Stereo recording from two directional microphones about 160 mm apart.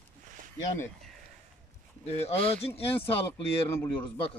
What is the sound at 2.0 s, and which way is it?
Speech, 40° left (ahead or behind).